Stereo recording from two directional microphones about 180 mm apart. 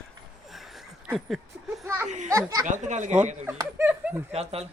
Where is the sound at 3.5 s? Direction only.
10° right (ahead or behind).